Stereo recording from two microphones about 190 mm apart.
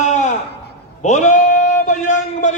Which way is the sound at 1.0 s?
40° left (ahead or behind).